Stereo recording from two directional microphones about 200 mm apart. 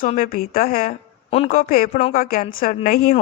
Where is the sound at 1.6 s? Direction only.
45° left (ahead or behind).